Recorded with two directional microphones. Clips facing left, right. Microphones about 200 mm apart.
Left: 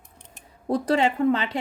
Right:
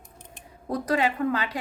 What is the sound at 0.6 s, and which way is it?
Speech, 30° left (ahead or behind).